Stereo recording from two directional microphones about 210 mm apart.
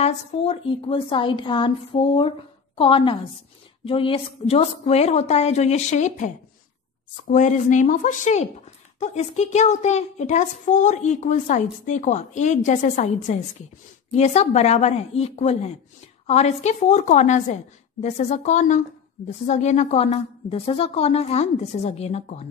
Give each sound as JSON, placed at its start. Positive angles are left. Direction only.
{"t": 0.0, "sound": "a woman's voice", "side_deg": 25}